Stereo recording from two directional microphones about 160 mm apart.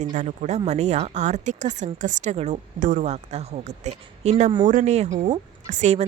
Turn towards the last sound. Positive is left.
turn(degrees=-45)  # may be behind; listen again after turning